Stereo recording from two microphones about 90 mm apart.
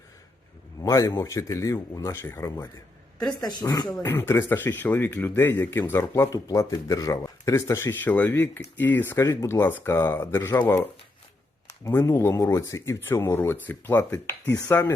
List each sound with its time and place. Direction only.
0.8 s speech: 40° left (ahead or behind)
3.2 s a woman's voice: 50° left (ahead or behind)
4.0 s speech: 30° left (ahead or behind)
6.3 s speech: 40° left (ahead or behind)
8.0 s speech: 20° left (ahead or behind)
11.9 s speech: 30° left (ahead or behind)